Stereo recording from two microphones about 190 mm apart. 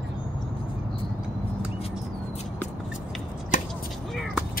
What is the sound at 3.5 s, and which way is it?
Chopping, 40° left (ahead or behind).